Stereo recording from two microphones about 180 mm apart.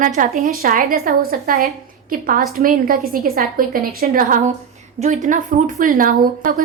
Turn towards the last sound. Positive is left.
turn(degrees=-50)  # may be behind; listen again after turning